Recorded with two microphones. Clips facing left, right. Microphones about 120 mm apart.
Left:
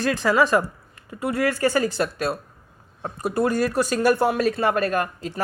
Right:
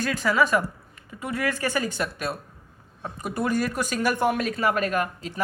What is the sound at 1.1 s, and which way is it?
Speech, 40° left (ahead or behind).